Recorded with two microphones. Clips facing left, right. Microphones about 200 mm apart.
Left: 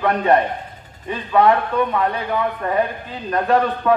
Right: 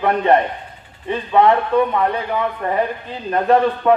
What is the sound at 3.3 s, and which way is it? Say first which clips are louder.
Speech: right 3 dB; 30° right (ahead or behind).